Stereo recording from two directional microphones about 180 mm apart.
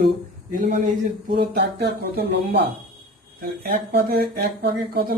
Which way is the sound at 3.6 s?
55° right (ahead or behind).